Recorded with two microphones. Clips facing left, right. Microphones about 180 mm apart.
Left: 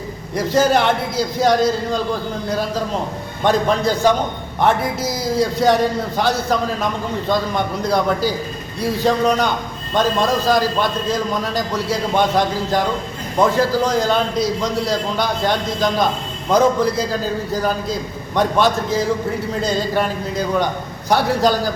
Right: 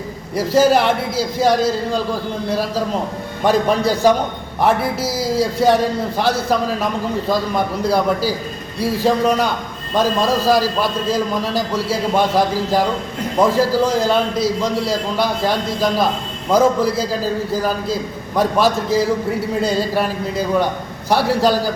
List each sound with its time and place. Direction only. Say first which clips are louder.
0.3 s a man's voice: right 2 dB; 5° right (ahead or behind)
3.4 s a man's voice: right 1 dB; 5° right (ahead or behind)